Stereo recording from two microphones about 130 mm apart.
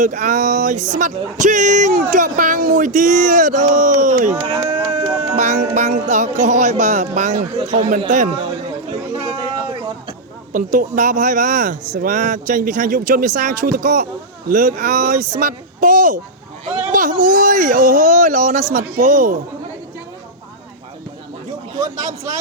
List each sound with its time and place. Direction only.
0.0 s speech: 70° right (ahead or behind)
4.4 s a sound: 45° right (ahead or behind)
5.4 s speech: 65° right (ahead or behind); by 7.9 s 80° right
8.9 s chatter: 50° right (ahead or behind)
10.5 s speech: 85° right